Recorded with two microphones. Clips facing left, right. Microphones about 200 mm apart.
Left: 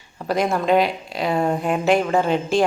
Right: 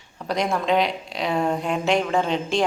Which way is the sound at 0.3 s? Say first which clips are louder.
Left 3 dB; 5° left (ahead or behind).